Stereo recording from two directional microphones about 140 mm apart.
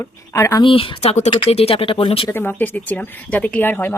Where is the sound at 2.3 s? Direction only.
15° left (ahead or behind).